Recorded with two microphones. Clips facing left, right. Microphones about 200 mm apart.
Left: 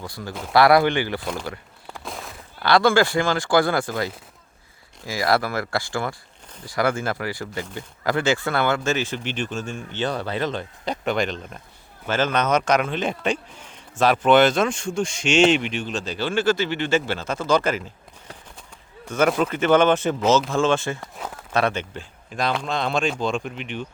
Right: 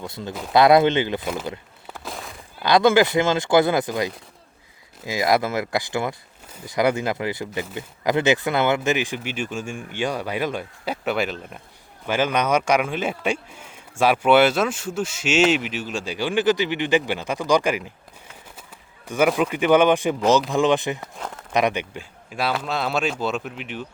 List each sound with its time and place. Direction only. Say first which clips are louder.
0.0 s speech: right 2 dB; 20° right (ahead or behind)
1.2 s speech: right 2 dB; 5° right (ahead or behind)
1.9 s a sound: even; centre (ahead or behind)
2.6 s a man's voice: right 1 dB; 20° right (ahead or behind)
19.0 s a man's voice: right 1 dB; 15° right (ahead or behind)
21.0 s speech: even; 5° left (ahead or behind)
21.5 s speech: right 1 dB; 15° right (ahead or behind)